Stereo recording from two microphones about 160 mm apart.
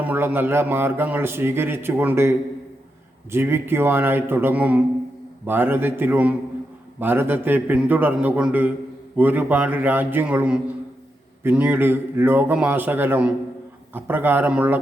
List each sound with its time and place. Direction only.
0.0 s speech: 10° right (ahead or behind)
3.3 s speech: 15° right (ahead or behind)